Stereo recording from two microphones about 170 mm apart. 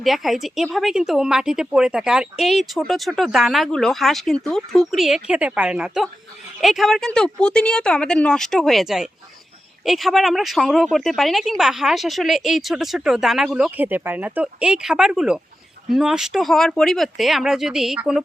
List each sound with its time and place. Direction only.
0.0 s speech: centre (ahead or behind)